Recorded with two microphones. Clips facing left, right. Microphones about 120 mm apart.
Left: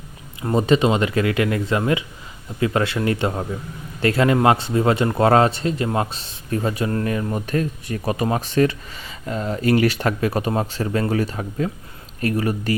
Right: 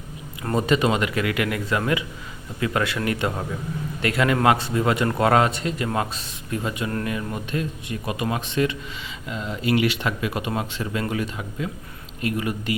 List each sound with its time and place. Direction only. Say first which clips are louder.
0.5 s speech: left 3 dB; 25° left (ahead or behind)
7.4 s speech: left 5 dB; 45° left (ahead or behind)